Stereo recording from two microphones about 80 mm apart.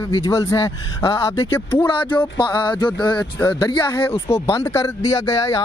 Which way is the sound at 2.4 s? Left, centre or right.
Left.